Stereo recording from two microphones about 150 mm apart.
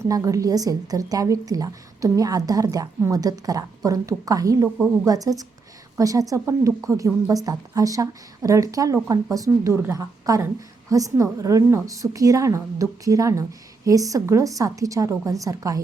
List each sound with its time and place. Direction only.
0.0 s a woman's voice: 20° right (ahead or behind)